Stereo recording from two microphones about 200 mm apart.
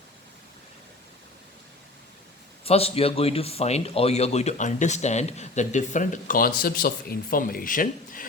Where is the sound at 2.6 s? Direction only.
30° left (ahead or behind).